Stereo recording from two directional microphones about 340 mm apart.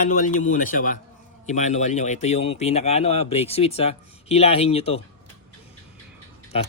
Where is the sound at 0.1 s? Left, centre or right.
Left.